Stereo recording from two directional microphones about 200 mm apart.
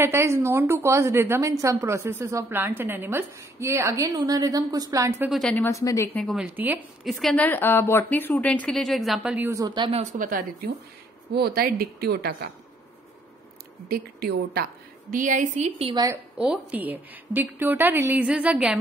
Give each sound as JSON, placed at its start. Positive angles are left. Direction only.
{"t": 0.0, "sound": "a woman's voice", "side_deg": -15}
{"t": 5.3, "sound": "speech", "side_deg": 5}
{"t": 6.2, "sound": "a woman's voice", "side_deg": -5}
{"t": 10.1, "sound": "a woman's voice", "side_deg": -45}
{"t": 13.8, "sound": "a woman's voice", "side_deg": -50}
{"t": 15.9, "sound": "a woman's voice", "side_deg": -20}
{"t": 16.3, "sound": "a woman's voice", "side_deg": -5}